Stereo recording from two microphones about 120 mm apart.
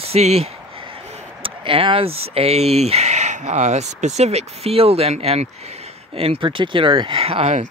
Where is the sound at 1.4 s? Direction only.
50° right (ahead or behind).